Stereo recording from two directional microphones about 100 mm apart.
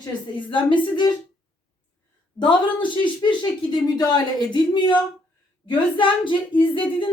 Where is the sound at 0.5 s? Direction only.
50° left (ahead or behind).